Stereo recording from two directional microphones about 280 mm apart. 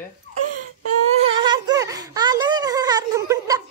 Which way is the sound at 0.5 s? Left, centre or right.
Right.